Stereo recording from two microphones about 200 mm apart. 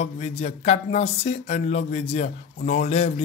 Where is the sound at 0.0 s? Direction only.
35° left (ahead or behind).